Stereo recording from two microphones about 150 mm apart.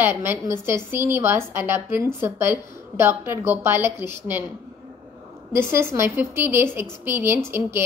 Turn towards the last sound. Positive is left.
turn(degrees=-15)  # may be behind; listen again after turning